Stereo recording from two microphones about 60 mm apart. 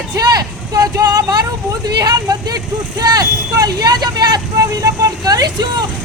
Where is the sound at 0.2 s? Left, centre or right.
Right.